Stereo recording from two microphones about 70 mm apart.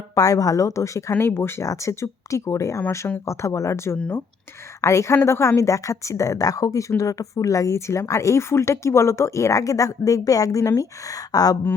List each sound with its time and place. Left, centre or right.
0.1 s speech: left
1.2 s speech: left